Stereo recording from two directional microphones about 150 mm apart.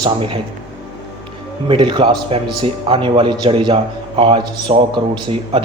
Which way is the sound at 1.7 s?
30° right (ahead or behind).